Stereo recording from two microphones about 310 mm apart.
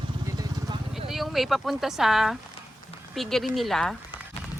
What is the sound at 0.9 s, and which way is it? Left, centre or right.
Speech, centre.